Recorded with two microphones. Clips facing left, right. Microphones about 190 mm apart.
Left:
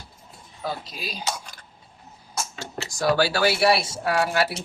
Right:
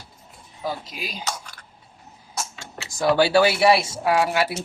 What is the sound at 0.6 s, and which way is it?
Speech, 15° right (ahead or behind).